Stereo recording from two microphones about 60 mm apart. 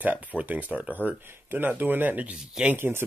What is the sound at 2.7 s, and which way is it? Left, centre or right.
Speech, right.